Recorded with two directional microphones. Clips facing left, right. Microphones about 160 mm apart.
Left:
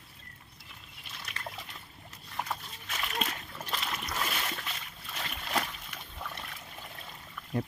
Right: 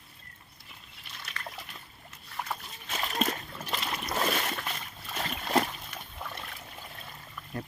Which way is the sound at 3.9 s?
40° right (ahead or behind).